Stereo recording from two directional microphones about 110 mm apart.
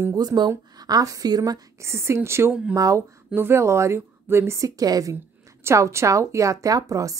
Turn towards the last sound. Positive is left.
turn(degrees=-30)  # may be behind; listen again after turning